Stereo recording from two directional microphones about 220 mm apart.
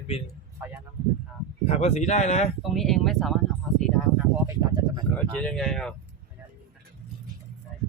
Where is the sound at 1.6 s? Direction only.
30° left (ahead or behind).